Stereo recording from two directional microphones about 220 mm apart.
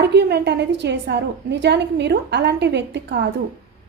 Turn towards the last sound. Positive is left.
turn(degrees=-50)  # may be behind; listen again after turning